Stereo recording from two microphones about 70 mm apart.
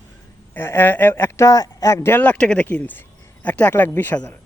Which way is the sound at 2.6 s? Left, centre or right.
Left.